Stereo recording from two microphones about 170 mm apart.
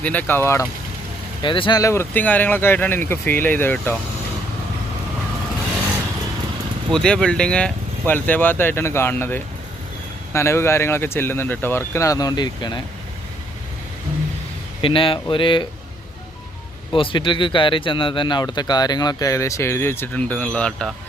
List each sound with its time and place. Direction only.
0.0 s speech: 10° left (ahead or behind)
1.4 s speech: 30° left (ahead or behind); by 3.9 s 10° left (ahead or behind)
6.9 s speech: 5° left (ahead or behind); by 12.8 s 25° left (ahead or behind)
14.8 s speech: 30° left (ahead or behind)
16.9 s speech: 30° left (ahead or behind); by 20.9 s 5° left (ahead or behind)